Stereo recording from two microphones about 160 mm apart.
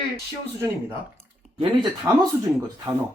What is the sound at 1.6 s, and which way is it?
Speech, 30° right (ahead or behind).